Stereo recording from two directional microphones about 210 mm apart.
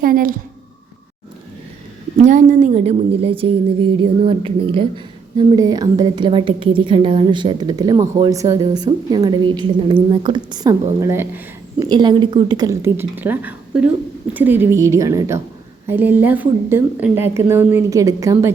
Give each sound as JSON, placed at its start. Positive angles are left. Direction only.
{"t": 0.0, "sound": "a woman's voice", "side_deg": -45}
{"t": 2.2, "sound": "a woman's voice", "side_deg": -35}